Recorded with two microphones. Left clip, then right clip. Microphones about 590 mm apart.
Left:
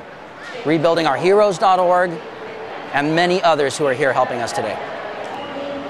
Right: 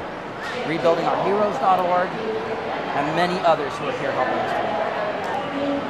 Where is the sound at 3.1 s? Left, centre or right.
Left.